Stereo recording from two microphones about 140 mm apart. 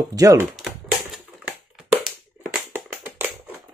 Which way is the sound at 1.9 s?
10° right (ahead or behind).